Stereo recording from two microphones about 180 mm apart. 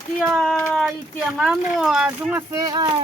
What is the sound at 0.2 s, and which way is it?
A child's voice, centre (ahead or behind).